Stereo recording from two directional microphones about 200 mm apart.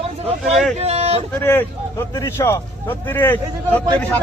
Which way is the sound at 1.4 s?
10° left (ahead or behind).